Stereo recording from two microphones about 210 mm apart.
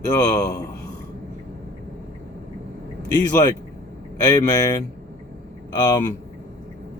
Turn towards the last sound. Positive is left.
turn(degrees=20)  # may be behind; listen again after turning